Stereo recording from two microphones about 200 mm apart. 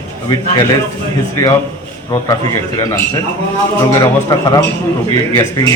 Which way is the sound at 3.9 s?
20° left (ahead or behind).